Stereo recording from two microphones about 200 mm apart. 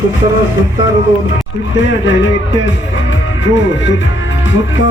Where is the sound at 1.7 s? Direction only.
65° left (ahead or behind).